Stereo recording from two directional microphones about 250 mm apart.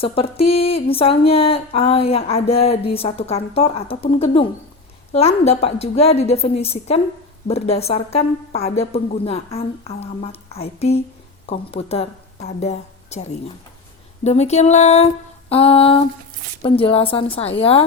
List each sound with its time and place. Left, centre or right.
0.0 s speech: left